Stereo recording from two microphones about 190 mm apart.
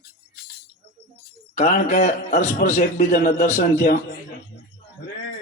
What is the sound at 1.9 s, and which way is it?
A man's voice, 40° left (ahead or behind).